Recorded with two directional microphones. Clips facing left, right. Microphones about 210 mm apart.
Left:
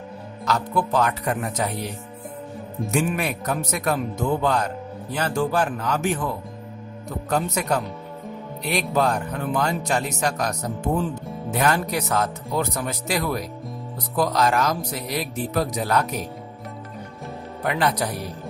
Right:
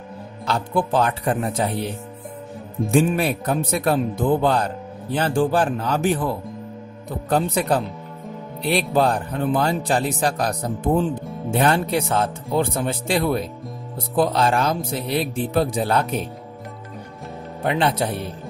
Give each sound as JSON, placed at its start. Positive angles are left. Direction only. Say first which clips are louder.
{"t": 0.5, "sound": "speech", "louder": "right 1 dB", "side_deg": -30}
{"t": 8.9, "sound": "speech", "louder": "even", "side_deg": -30}
{"t": 17.6, "sound": "speech", "louder": "right 2 dB", "side_deg": -25}